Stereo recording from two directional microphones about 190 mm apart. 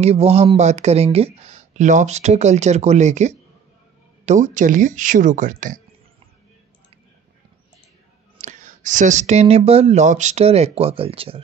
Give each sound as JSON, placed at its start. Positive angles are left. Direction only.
{"t": 0.0, "sound": "speech", "side_deg": -35}
{"t": 8.4, "sound": "speech", "side_deg": -40}